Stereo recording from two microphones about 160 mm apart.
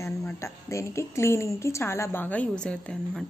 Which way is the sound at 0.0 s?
20° left (ahead or behind).